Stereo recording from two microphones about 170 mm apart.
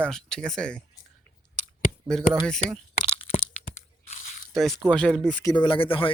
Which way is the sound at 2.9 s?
35° left (ahead or behind).